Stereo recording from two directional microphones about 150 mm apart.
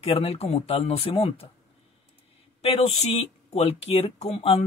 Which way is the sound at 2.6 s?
40° left (ahead or behind).